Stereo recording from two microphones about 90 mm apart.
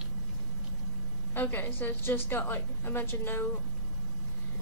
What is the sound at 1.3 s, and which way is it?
A woman's voice, 20° left (ahead or behind).